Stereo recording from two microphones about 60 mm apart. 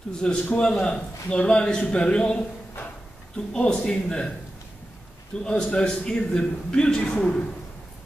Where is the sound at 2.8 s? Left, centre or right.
Left.